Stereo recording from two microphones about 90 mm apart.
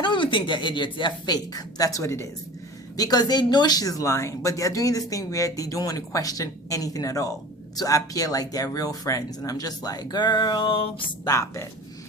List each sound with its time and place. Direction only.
0.0 s a woman's voice: 65° left (ahead or behind); by 2.2 s 30° left (ahead or behind)
2.9 s speech: 45° left (ahead or behind); by 11.0 s 85° left
11.3 s speech: 35° left (ahead or behind)